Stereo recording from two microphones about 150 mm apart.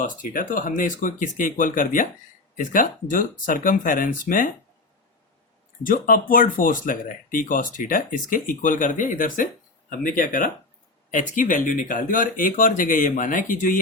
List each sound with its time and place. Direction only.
0.0 s speech: 65° left (ahead or behind)
5.8 s speech: 70° left (ahead or behind)